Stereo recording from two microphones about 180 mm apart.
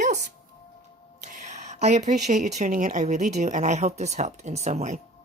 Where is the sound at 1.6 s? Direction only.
40° right (ahead or behind).